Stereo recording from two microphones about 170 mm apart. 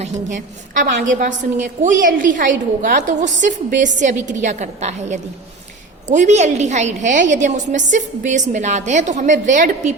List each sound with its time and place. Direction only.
0.0 s a woman's voice: 45° right (ahead or behind)